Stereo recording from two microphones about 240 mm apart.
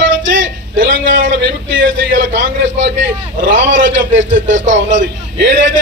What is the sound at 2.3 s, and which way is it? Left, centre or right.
A man's voice, right.